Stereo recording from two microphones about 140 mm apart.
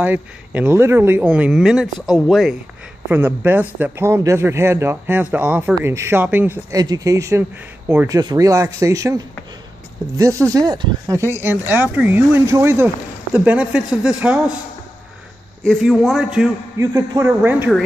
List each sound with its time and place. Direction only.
0.0 s a man's voice: 15° right (ahead or behind)
3.1 s a man's voice: 15° right (ahead or behind)
6.7 s a man's voice: 25° right (ahead or behind)
8.2 s speech: 25° right (ahead or behind)
10.1 s a man's voice: 20° right (ahead or behind)
15.6 s a man's voice: centre (ahead or behind)
16.7 s speech: 25° right (ahead or behind)